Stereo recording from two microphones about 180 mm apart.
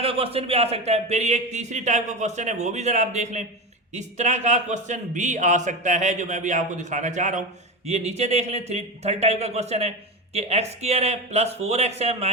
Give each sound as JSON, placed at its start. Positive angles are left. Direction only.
{"t": 0.0, "sound": "a man's voice", "side_deg": -30}